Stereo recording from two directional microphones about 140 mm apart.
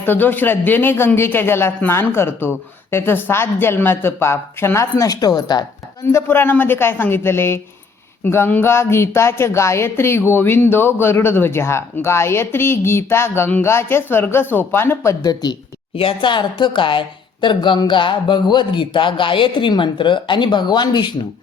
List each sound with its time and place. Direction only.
0.0 s speech: 15° left (ahead or behind); by 5.6 s 30° left (ahead or behind)
6.1 s speech: 15° left (ahead or behind)
15.2 s speech: 30° left (ahead or behind)